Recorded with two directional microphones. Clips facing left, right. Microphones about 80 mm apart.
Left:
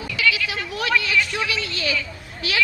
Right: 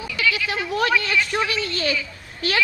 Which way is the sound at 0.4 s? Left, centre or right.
Right.